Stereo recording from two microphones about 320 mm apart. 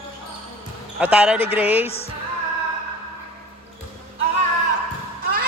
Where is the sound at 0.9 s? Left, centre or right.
Centre.